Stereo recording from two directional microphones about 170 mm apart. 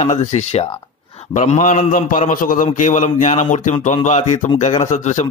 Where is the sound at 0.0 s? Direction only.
45° left (ahead or behind).